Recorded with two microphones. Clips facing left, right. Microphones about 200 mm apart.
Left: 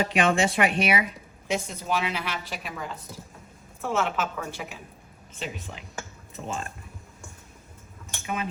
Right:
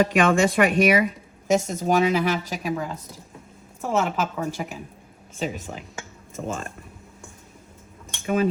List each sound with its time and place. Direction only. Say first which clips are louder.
0.0 s a woman's voice: right 4 dB; 50° right (ahead or behind)